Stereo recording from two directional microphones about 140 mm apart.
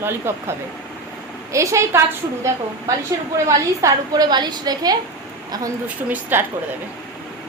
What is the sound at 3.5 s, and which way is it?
A woman's voice, 25° right (ahead or behind).